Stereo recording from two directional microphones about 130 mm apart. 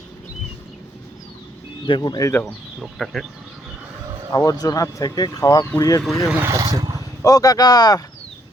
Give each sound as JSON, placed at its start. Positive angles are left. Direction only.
{"t": 2.0, "sound": "speech", "side_deg": 30}
{"t": 3.0, "sound": "speech", "side_deg": 0}
{"t": 4.3, "sound": "speech", "side_deg": 25}
{"t": 6.0, "sound": "speech", "side_deg": 0}
{"t": 6.3, "sound": "speech", "side_deg": -15}
{"t": 6.6, "sound": "speech", "side_deg": -30}
{"t": 7.2, "sound": "speech", "side_deg": 25}